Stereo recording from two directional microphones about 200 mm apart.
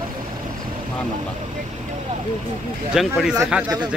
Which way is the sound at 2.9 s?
Centre (ahead or behind).